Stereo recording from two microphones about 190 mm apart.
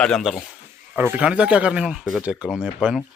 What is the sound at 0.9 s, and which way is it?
A woman's voice, 10° right (ahead or behind).